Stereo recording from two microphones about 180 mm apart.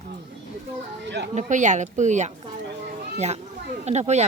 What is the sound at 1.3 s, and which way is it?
A child's voice, 45° right (ahead or behind).